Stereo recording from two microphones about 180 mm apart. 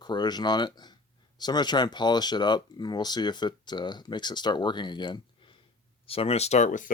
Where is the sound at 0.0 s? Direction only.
25° left (ahead or behind).